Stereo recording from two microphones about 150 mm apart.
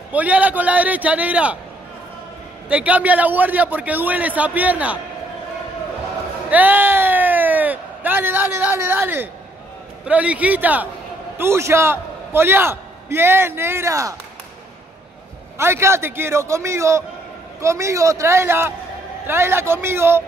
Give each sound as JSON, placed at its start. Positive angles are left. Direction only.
{"t": 0.1, "sound": "a man's voice", "side_deg": -10}
{"t": 2.7, "sound": "a man's voice", "side_deg": -10}
{"t": 6.5, "sound": "a man's voice", "side_deg": -10}
{"t": 15.5, "sound": "a man's voice", "side_deg": -15}